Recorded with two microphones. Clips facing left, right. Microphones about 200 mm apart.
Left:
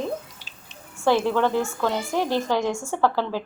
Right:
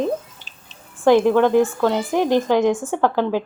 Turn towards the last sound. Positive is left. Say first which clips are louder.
# right 4 dB
turn(degrees=-15)  # may be behind; listen again after turning